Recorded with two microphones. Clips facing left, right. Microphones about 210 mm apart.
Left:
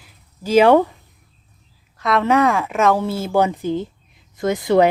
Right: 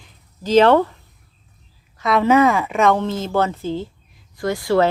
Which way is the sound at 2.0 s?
Centre (ahead or behind).